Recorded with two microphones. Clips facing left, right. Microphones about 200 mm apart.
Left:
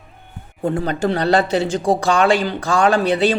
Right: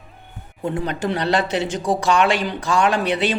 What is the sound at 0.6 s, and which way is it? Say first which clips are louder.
A man's voice: left 4 dB; 35° left (ahead or behind).